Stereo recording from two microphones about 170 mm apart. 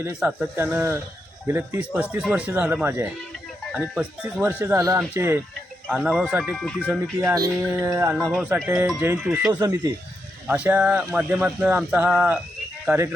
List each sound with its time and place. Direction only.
0.2 s speech: 5° right (ahead or behind)
5.9 s speech: 5° right (ahead or behind)
7.2 s speech: 20° right (ahead or behind)